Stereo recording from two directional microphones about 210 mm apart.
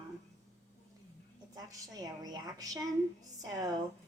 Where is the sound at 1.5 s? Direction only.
15° right (ahead or behind).